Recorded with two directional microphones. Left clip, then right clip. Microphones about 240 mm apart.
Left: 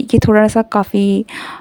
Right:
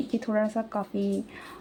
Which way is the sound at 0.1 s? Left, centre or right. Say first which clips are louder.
Left 18 dB; left.